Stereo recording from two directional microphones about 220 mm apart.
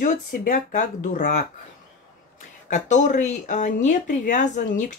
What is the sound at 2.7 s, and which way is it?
Speech, 35° left (ahead or behind).